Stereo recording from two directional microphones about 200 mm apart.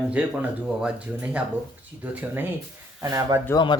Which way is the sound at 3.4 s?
20° left (ahead or behind).